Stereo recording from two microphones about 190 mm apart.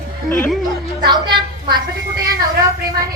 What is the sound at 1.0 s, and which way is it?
Speech, 25° right (ahead or behind).